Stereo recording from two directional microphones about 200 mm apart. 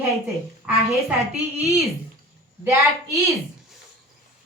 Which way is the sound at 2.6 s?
15° right (ahead or behind).